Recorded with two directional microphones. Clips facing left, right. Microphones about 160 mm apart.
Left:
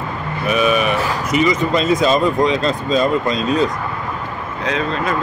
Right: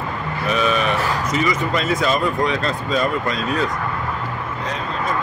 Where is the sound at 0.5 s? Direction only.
10° left (ahead or behind).